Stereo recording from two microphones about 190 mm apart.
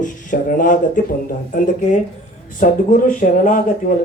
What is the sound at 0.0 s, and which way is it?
Speech, 45° left (ahead or behind).